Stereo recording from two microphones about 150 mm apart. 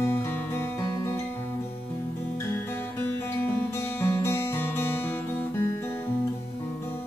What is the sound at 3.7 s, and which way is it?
Music, 20° left (ahead or behind).